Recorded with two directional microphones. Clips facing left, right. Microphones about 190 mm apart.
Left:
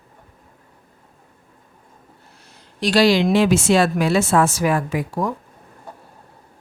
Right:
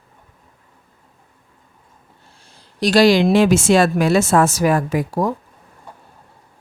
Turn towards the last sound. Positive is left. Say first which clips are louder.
# right 3 dB
turn(degrees=-40)  # may be behind; listen again after turning